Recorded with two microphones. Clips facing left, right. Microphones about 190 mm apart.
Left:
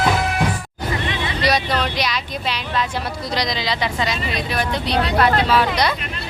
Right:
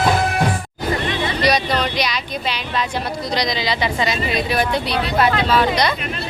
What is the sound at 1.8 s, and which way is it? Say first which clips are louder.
Speech: right 1 dB; centre (ahead or behind).